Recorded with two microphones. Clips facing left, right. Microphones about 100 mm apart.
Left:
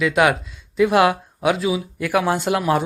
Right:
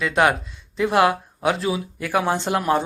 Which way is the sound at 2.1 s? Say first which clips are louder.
Left 2 dB; 25° right (ahead or behind).